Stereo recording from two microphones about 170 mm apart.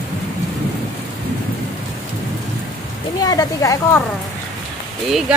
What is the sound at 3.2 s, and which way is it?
Speech, 20° left (ahead or behind).